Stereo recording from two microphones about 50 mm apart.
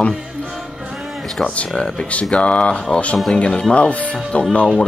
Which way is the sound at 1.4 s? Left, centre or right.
Left.